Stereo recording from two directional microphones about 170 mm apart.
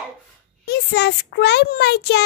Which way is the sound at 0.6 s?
75° left (ahead or behind).